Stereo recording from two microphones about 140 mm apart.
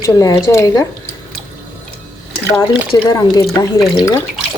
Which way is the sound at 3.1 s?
30° left (ahead or behind).